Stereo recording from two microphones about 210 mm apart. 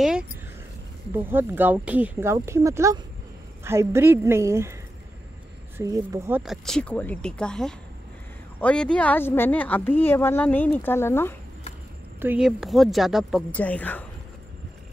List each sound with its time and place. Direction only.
0.0 s a sound: 5° right (ahead or behind)
1.1 s speech: 10° right (ahead or behind)
5.8 s speech: 15° right (ahead or behind); by 11.3 s 10° left (ahead or behind)
12.2 s speech: 5° right (ahead or behind)